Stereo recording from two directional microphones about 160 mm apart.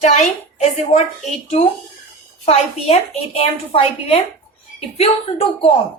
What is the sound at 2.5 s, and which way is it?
A woman's voice, 40° left (ahead or behind).